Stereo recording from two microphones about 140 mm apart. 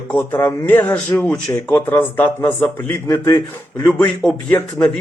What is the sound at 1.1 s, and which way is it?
Speech, 5° left (ahead or behind).